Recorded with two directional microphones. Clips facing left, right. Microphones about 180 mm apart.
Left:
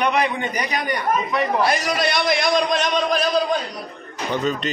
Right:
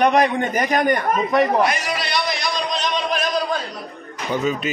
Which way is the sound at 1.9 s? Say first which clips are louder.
Left 4 dB; 50° left (ahead or behind).